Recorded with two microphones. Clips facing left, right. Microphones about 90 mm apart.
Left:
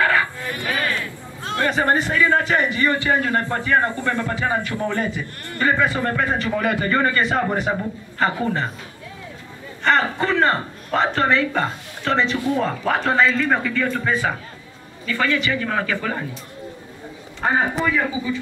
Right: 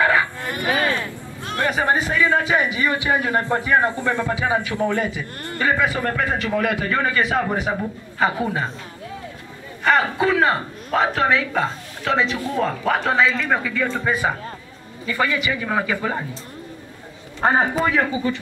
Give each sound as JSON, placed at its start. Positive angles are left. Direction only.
{"t": 0.0, "sound": "a sound", "side_deg": -15}
{"t": 1.6, "sound": "a man's voice", "side_deg": -10}
{"t": 9.8, "sound": "a man's voice", "side_deg": -5}
{"t": 13.8, "sound": "a man's voice", "side_deg": -15}
{"t": 17.4, "sound": "a man's voice", "side_deg": -35}